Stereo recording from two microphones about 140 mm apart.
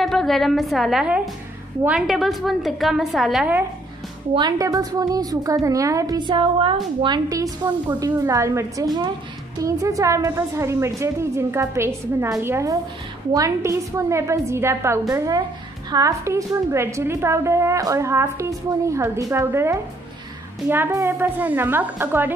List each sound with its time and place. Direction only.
0.0 s a woman's voice: centre (ahead or behind)
4.3 s a woman's voice: 30° right (ahead or behind); by 22.3 s 15° right (ahead or behind)